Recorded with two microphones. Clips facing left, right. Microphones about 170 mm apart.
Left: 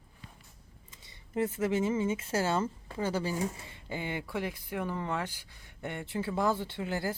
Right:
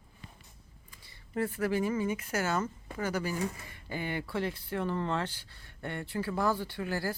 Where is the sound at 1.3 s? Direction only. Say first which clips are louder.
Left 1 dB; 20° left (ahead or behind).